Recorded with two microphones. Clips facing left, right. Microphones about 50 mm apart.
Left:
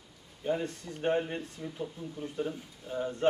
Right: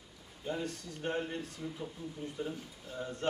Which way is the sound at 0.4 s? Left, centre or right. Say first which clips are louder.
Left 5 dB; left.